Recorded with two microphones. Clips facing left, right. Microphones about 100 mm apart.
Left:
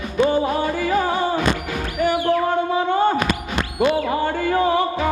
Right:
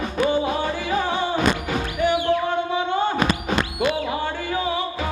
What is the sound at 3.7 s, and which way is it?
Music, 45° left (ahead or behind).